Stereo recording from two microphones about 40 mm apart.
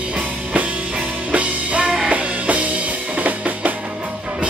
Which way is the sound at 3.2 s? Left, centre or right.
Right.